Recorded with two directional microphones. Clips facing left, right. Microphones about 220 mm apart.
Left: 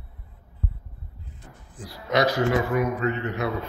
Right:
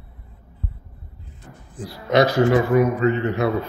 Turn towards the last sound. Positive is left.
turn(degrees=-30)  # may be behind; listen again after turning